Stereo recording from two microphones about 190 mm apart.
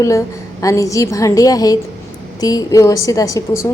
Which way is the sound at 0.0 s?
15° left (ahead or behind).